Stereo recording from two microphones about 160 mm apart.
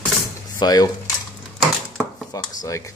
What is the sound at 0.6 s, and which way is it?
Speech, 25° left (ahead or behind).